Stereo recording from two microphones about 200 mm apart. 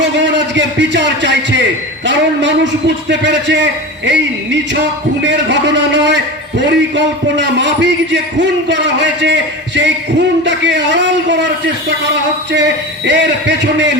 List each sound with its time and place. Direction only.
0.0 s a man's voice: 60° right (ahead or behind)